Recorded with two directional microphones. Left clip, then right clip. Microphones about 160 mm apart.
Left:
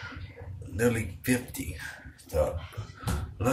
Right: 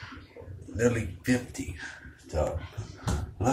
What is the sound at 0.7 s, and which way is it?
Speech, 30° left (ahead or behind).